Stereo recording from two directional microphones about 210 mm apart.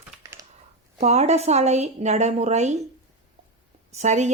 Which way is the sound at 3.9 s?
35° right (ahead or behind).